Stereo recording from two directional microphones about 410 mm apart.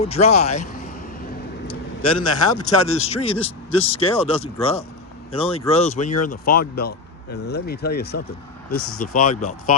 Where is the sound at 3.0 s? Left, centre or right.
Centre.